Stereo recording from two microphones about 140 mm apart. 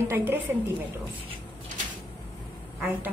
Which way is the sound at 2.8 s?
10° right (ahead or behind).